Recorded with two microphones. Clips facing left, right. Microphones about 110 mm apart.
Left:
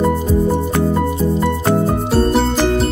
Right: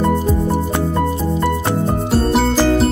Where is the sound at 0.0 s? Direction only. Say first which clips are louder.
Left 1 dB; centre (ahead or behind).